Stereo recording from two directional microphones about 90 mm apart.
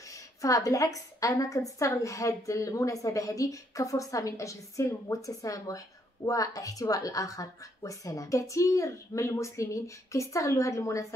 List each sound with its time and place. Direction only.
0.1 s a woman's voice: 40° left (ahead or behind)